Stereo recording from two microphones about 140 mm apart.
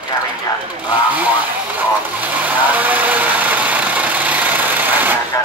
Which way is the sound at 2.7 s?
10° right (ahead or behind).